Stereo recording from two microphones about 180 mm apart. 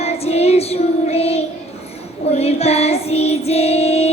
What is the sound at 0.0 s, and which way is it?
Child singing, 35° left (ahead or behind).